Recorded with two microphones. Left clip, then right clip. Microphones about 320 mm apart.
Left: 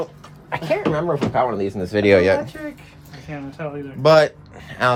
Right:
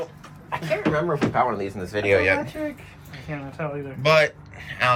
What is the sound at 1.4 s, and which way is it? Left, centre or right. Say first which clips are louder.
Speech: left 3 dB; left.